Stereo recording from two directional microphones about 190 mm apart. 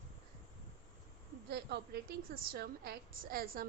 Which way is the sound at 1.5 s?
60° right (ahead or behind).